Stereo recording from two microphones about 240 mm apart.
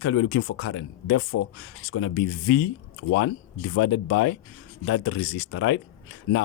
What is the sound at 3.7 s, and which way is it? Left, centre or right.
Speech, left.